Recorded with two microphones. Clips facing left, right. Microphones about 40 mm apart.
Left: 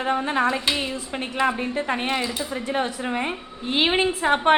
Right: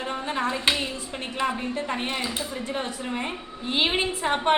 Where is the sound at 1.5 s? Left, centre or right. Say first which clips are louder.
Left 3 dB; left.